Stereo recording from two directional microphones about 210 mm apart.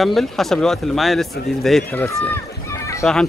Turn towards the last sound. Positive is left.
turn(degrees=15)  # may be behind; listen again after turning